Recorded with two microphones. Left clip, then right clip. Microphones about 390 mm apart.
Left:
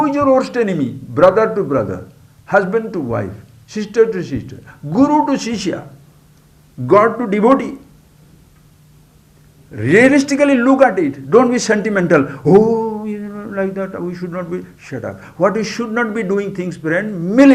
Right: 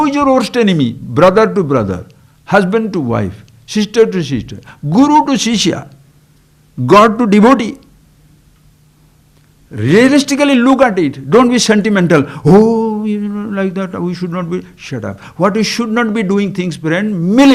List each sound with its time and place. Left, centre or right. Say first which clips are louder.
0.0 s a man's voice: right 2 dB; right
6.8 s a man's voice: right 4 dB; right
9.7 s a man's voice: right 1 dB; right